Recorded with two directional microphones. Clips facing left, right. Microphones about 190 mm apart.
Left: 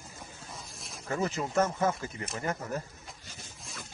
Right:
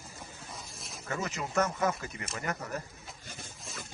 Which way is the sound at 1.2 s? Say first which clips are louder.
Left 3 dB; 30° left (ahead or behind).